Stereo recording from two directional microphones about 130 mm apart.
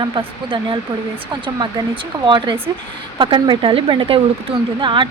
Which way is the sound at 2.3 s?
35° right (ahead or behind).